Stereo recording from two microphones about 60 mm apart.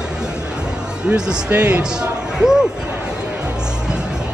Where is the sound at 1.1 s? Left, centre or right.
Right.